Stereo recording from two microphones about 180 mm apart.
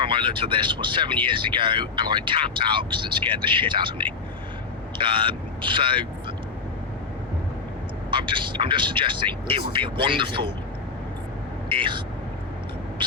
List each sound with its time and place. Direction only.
0.0 s speech: 30° right (ahead or behind)
8.1 s speech: 25° right (ahead or behind)
11.7 s speech: 30° right (ahead or behind)